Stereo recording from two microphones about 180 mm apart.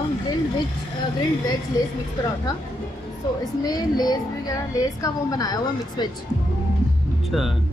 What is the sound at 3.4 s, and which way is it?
Speech, 20° left (ahead or behind).